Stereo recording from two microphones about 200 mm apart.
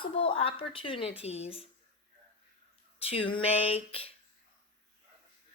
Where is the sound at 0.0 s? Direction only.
25° left (ahead or behind).